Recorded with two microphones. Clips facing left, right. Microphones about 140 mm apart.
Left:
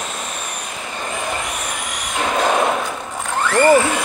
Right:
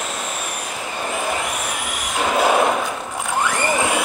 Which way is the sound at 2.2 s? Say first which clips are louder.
Right 1 dB; 5° right (ahead or behind).